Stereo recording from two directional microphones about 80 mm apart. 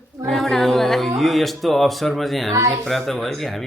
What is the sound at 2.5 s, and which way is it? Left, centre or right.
Speech, right.